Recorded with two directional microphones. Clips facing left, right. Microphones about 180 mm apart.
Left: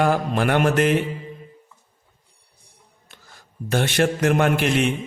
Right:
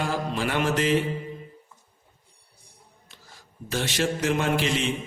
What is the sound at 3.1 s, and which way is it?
A man's voice, 55° left (ahead or behind).